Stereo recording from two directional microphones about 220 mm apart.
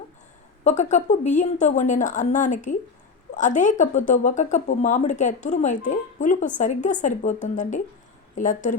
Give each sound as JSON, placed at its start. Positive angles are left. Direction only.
{"t": 0.6, "sound": "speech", "side_deg": 30}